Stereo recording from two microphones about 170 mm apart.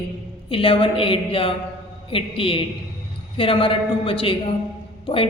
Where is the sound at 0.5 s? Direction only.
30° left (ahead or behind).